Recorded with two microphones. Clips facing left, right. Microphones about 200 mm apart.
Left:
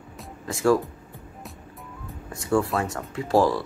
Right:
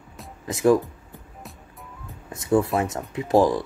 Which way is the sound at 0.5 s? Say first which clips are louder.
Right 2 dB; 20° right (ahead or behind).